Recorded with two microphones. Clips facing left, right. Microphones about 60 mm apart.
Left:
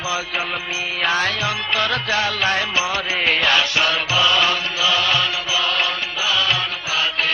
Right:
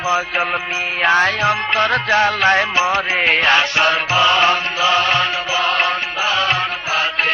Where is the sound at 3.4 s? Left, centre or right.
Right.